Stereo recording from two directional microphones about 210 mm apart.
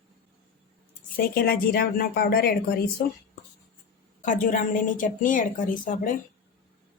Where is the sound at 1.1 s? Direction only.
45° left (ahead or behind).